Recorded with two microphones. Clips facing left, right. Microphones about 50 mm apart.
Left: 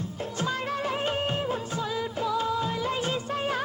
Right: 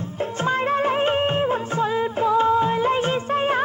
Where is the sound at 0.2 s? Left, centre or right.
Right.